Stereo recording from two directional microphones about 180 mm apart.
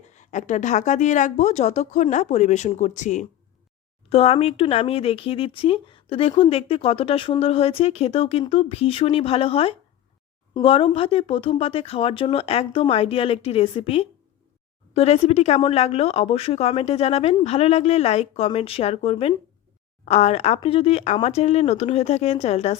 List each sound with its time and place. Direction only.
0.2 s speech: 45° left (ahead or behind)